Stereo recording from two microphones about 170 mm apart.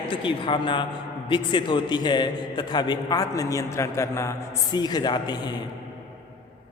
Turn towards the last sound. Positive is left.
turn(degrees=25)  # may be behind; listen again after turning